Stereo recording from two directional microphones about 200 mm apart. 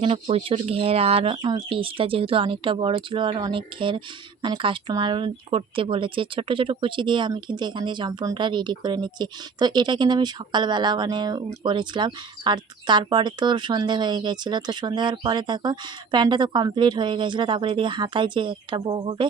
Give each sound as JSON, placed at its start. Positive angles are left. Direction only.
{"t": 0.0, "sound": "speech", "side_deg": -30}